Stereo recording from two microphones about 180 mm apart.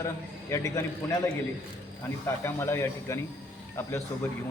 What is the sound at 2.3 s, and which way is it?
Speech, 15° left (ahead or behind).